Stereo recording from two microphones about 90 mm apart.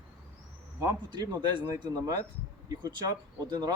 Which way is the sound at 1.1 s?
55° right (ahead or behind).